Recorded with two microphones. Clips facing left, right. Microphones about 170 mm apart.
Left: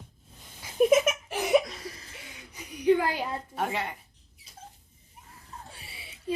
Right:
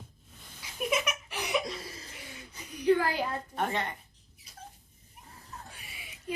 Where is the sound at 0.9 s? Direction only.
45° left (ahead or behind).